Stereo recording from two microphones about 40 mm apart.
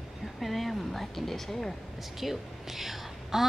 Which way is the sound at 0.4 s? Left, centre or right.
Centre.